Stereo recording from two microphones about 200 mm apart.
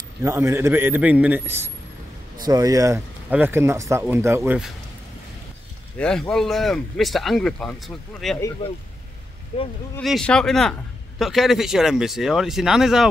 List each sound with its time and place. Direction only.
0.2 s speech: 15° right (ahead or behind)
5.9 s a man's voice: 5° left (ahead or behind)
8.6 s speech: 20° left (ahead or behind)
9.9 s a man's voice: 5° left (ahead or behind)